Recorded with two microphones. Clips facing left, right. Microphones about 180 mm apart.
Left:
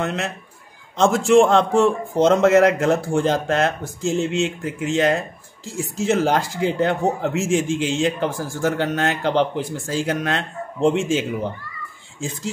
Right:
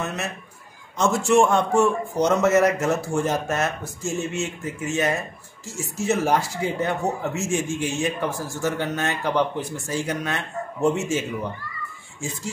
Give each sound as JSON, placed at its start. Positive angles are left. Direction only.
{"t": 0.0, "sound": "speech", "side_deg": 90}